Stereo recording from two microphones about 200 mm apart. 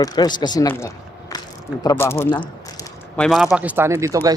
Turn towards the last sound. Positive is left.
turn(degrees=-15)  # may be behind; listen again after turning